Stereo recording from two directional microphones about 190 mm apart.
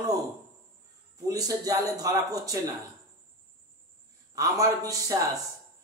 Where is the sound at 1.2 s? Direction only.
20° right (ahead or behind).